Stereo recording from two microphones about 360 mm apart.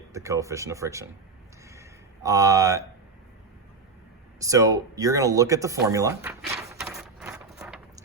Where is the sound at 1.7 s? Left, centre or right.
Centre.